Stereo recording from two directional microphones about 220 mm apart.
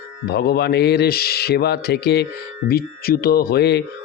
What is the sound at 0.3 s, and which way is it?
Speech, 45° left (ahead or behind).